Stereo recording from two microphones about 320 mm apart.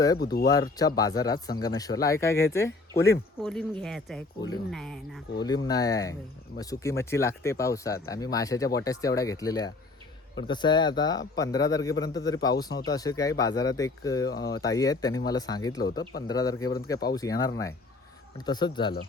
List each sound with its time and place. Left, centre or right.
0.2 s speech: left
0.8 s speech: centre
5.4 s speech: centre
14.3 s speech: left
14.6 s speech: centre